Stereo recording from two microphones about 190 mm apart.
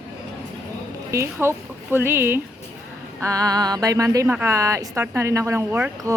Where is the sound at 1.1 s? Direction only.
15° right (ahead or behind).